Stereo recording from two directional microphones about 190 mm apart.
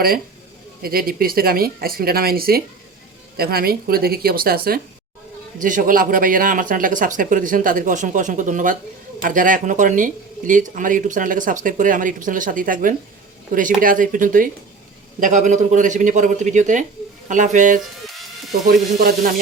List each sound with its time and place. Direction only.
0.8 s a man's voice: 50° right (ahead or behind)
18.7 s speech: 50° right (ahead or behind)